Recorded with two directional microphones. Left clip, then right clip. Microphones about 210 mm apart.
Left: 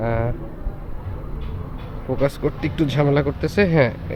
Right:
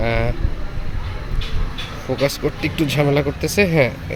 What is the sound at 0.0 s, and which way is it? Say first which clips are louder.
Vehicle: right 2 dB; 10° right (ahead or behind).